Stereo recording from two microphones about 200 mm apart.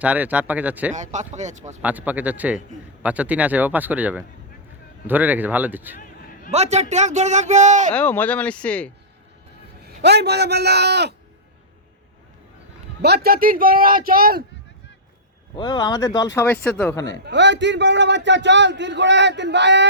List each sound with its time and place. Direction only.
0.0 s speech: 10° right (ahead or behind)
0.9 s speech: 35° right (ahead or behind)
1.8 s speech: 10° right (ahead or behind)
6.5 s speech: 35° right (ahead or behind)
7.9 s speech: 10° left (ahead or behind)
9.8 s a man's voice: 55° right (ahead or behind)
13.0 s a man's voice: 55° right (ahead or behind)
15.5 s speech: 20° left (ahead or behind)
17.2 s a man's voice: 60° right (ahead or behind)